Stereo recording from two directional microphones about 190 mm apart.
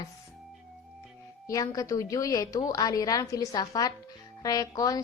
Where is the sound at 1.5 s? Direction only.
20° left (ahead or behind).